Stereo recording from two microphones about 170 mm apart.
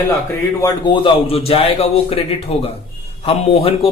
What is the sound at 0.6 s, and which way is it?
A man's voice, 25° left (ahead or behind).